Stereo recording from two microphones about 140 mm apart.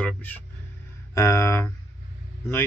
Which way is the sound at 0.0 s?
10° left (ahead or behind).